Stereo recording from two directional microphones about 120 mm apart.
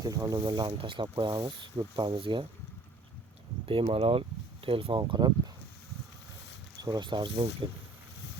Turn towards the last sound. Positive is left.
turn(degrees=-40)  # may be behind; listen again after turning